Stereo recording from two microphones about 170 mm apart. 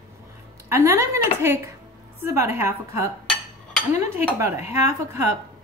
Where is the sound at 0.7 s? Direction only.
15° right (ahead or behind).